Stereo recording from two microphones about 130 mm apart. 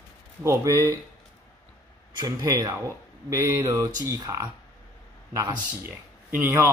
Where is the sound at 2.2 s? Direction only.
30° right (ahead or behind).